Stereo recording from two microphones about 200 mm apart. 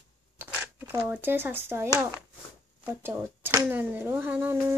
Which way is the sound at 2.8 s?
10° right (ahead or behind).